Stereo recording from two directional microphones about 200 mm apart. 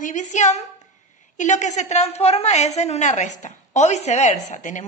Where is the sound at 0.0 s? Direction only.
35° left (ahead or behind).